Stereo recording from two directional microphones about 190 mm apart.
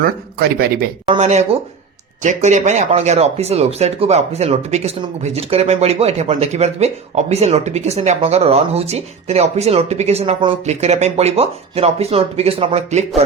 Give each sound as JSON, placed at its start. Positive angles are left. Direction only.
{"t": 0.0, "sound": "speech", "side_deg": -55}
{"t": 1.0, "sound": "speech", "side_deg": -35}